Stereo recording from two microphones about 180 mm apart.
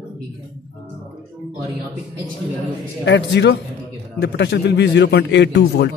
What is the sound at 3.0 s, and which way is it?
A man's voice, 75° left (ahead or behind).